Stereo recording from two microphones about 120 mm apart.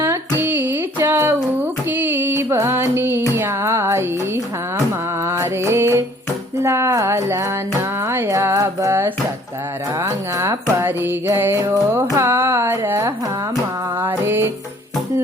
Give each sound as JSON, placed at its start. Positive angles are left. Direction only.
{"t": 0.0, "sound": "music", "side_deg": -20}
{"t": 6.6, "sound": "speech", "side_deg": -20}